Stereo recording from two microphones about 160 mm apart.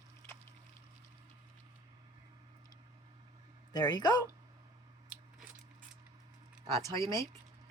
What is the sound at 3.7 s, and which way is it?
Speech, 25° left (ahead or behind).